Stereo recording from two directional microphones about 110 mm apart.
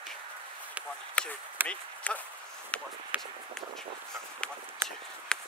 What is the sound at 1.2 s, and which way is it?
Speech, 10° left (ahead or behind).